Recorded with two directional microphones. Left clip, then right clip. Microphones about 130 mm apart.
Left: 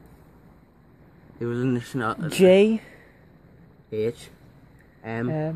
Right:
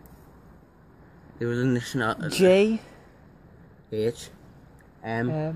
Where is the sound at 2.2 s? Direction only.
55° left (ahead or behind).